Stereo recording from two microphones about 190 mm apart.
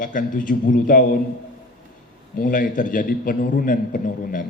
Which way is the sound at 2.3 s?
45° left (ahead or behind).